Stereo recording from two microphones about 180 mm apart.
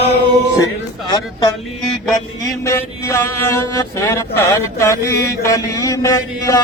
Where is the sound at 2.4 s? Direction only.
15° left (ahead or behind).